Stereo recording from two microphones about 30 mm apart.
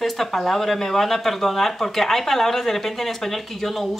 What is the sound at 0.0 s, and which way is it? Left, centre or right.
Speech, centre.